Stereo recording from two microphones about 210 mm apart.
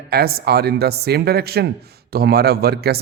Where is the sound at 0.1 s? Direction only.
50° right (ahead or behind).